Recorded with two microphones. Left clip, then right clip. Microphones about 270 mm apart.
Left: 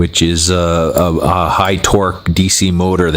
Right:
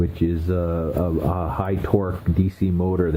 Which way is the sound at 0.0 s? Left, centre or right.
Left.